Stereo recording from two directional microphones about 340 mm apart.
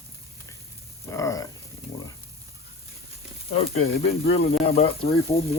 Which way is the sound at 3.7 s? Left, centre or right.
Left.